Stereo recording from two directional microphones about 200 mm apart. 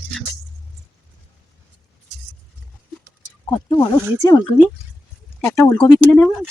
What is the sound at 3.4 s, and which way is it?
Speech, 20° left (ahead or behind).